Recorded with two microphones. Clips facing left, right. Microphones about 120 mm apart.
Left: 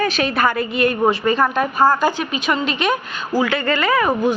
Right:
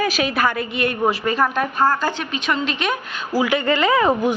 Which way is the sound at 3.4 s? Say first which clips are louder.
Right 1 dB; 15° right (ahead or behind).